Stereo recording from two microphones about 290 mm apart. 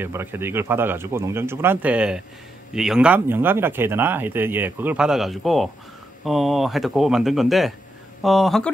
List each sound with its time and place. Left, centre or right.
0.0 s speech: centre